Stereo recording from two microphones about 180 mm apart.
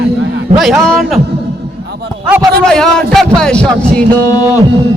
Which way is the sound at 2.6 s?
5° left (ahead or behind).